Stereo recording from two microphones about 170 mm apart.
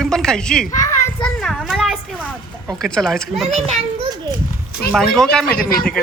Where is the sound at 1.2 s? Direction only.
Centre (ahead or behind).